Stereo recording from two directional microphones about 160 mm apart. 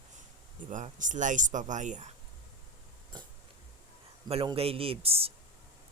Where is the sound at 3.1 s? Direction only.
30° right (ahead or behind).